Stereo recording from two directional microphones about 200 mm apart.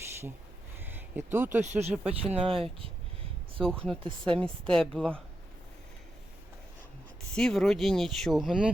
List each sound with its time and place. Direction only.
0.9 s a sound: 10° right (ahead or behind)
1.6 s speech: 35° right (ahead or behind)
3.6 s speech: 5° left (ahead or behind)
7.3 s speech: centre (ahead or behind)